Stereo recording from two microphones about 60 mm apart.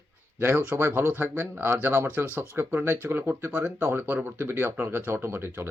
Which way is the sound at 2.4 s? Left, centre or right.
Right.